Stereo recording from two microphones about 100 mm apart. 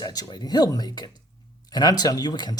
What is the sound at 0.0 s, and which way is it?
Speech, 40° left (ahead or behind).